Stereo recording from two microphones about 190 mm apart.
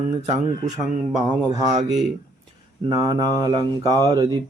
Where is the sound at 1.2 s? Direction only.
20° right (ahead or behind).